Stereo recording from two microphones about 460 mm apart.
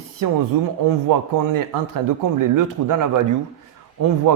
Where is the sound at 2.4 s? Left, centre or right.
Right.